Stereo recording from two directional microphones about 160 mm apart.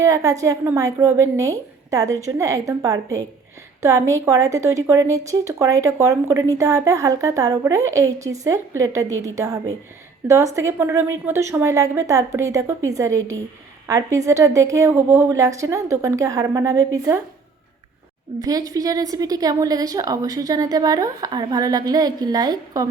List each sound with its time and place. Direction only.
0.0 s a woman's voice: 20° right (ahead or behind)
18.3 s a woman's voice: 25° right (ahead or behind)